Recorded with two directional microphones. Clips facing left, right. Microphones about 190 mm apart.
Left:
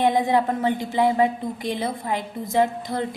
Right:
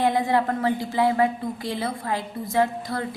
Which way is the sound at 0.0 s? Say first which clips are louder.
Left 2 dB; 20° left (ahead or behind).